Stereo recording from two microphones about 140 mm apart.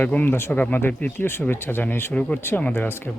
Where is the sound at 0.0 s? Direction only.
10° left (ahead or behind).